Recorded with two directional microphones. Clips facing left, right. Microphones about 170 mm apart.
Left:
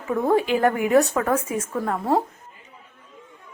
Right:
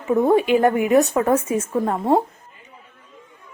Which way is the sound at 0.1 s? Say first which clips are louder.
Right 4 dB; 20° right (ahead or behind).